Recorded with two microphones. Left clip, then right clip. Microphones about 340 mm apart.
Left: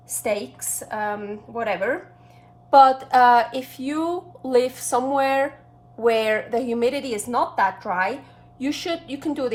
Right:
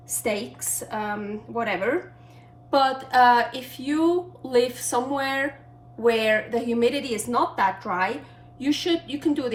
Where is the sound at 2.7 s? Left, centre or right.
Centre.